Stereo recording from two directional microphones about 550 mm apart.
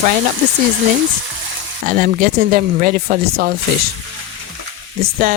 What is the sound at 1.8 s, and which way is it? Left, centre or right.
Speech, centre.